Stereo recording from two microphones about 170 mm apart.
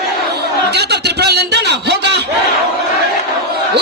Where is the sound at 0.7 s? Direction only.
75° right (ahead or behind).